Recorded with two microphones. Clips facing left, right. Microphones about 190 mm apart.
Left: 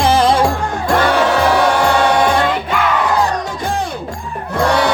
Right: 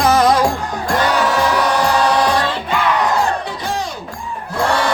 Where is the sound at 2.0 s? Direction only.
25° left (ahead or behind).